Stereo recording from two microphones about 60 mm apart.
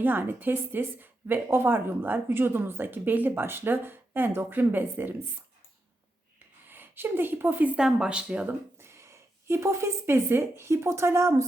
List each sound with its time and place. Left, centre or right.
0.0 s a woman's voice: right
6.7 s a woman's voice: right
7.8 s speech: centre
8.8 s speech: right